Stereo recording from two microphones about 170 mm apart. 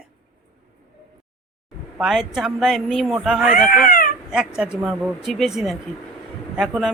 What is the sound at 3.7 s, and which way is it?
Speech, 55° left (ahead or behind).